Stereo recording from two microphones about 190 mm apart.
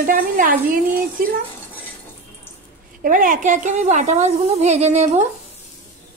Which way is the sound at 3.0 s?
45° right (ahead or behind).